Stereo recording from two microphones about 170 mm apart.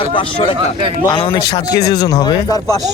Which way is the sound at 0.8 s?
30° right (ahead or behind).